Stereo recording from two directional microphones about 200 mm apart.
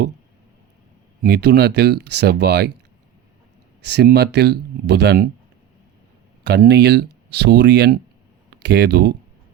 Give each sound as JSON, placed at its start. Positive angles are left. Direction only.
{"t": 1.2, "sound": "speech", "side_deg": -55}
{"t": 3.8, "sound": "speech", "side_deg": -55}
{"t": 6.4, "sound": "speech", "side_deg": -55}